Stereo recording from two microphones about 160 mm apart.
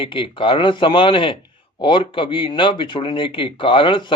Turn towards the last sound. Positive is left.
turn(degrees=30)  # may be behind; listen again after turning